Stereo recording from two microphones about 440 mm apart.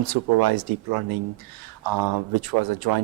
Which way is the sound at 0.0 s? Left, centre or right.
Right.